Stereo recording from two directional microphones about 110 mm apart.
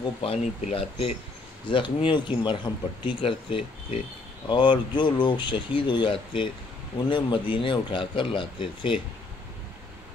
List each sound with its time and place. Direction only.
0.0 s speech: 60° left (ahead or behind); by 0.8 s 90° left
1.7 s speech: 50° left (ahead or behind)